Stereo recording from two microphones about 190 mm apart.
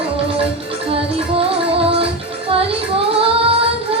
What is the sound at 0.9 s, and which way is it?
Music, 30° right (ahead or behind).